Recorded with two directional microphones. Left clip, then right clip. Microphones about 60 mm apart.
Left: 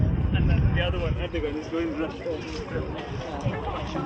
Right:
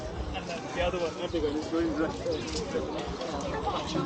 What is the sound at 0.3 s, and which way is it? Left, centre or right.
Vehicle, centre.